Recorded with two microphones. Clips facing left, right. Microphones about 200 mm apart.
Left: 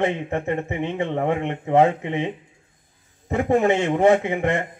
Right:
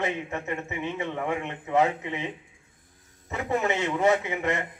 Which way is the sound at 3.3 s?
50° left (ahead or behind).